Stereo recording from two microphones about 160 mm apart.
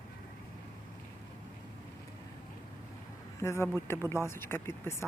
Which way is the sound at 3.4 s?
15° left (ahead or behind).